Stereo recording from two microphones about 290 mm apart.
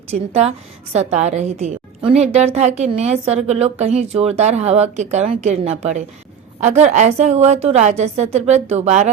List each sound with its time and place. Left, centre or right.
0.1 s a woman's voice: right